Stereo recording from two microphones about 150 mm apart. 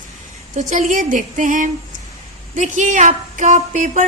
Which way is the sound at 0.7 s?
55° right (ahead or behind).